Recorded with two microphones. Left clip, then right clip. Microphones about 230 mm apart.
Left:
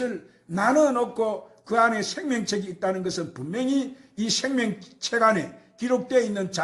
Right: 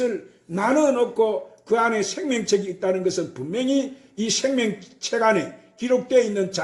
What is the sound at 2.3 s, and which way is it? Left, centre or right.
Speech, left.